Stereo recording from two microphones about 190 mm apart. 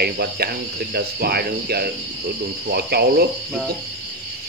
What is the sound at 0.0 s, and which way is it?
Speech, 55° right (ahead or behind).